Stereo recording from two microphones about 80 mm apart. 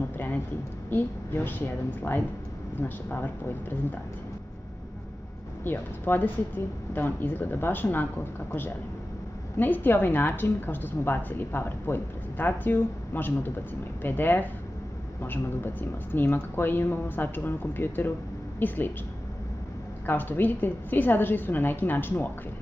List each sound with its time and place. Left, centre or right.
0.8 s a woman's voice: left
5.6 s a woman's voice: left
20.1 s a woman's voice: left